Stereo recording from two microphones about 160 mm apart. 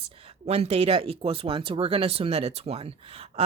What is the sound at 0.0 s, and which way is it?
Speech, 35° right (ahead or behind).